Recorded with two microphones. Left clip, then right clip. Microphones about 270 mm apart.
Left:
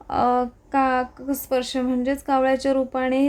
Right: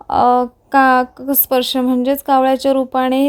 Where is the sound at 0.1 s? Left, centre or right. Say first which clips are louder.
Right 8 dB; centre.